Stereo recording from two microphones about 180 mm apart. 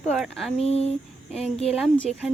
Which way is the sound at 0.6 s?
35° left (ahead or behind).